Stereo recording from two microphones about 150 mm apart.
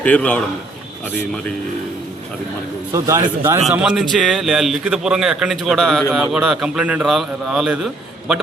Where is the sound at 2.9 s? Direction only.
20° right (ahead or behind).